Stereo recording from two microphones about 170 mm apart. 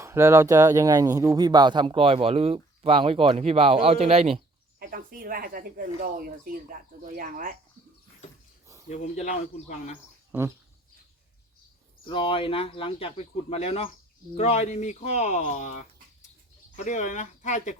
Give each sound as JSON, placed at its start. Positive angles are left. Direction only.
{"t": 0.0, "sound": "speech", "side_deg": -15}
{"t": 4.8, "sound": "speech", "side_deg": -55}
{"t": 8.9, "sound": "speech", "side_deg": 45}
{"t": 12.0, "sound": "speech", "side_deg": 30}